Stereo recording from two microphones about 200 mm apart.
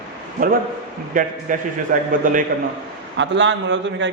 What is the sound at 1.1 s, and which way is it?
A man's voice, 40° right (ahead or behind).